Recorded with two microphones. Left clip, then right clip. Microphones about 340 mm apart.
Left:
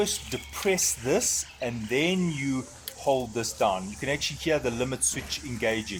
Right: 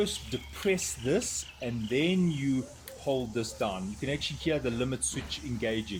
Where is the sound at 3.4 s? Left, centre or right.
Centre.